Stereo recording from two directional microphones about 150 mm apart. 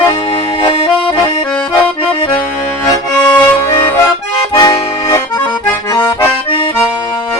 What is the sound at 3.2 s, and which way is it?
Accordion, 10° left (ahead or behind).